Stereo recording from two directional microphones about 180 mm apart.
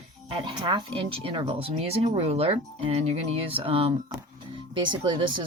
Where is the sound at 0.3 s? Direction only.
25° right (ahead or behind).